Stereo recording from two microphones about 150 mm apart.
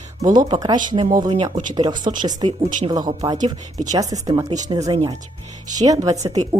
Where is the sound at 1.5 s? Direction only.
60° right (ahead or behind).